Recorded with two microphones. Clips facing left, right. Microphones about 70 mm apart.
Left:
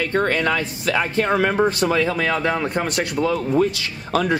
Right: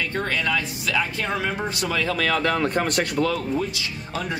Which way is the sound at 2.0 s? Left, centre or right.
Centre.